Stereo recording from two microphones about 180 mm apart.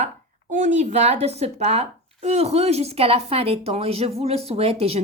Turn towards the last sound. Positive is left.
turn(degrees=-35)  # may be behind; listen again after turning